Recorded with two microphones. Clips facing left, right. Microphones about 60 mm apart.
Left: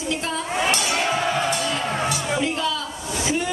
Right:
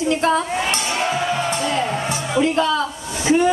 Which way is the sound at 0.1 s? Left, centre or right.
Right.